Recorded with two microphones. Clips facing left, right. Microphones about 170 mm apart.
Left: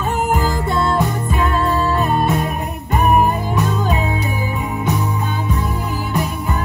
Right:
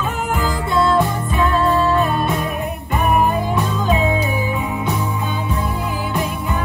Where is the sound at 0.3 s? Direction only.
40° left (ahead or behind).